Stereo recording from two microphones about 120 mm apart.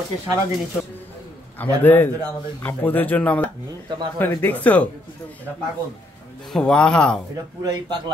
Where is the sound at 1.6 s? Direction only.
15° left (ahead or behind).